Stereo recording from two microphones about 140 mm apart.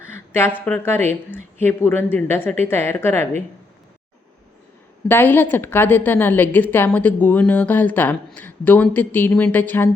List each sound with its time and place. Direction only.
0.1 s a sound: 15° left (ahead or behind)
0.8 s a woman's voice: 15° left (ahead or behind)
5.0 s a woman's voice: 15° left (ahead or behind)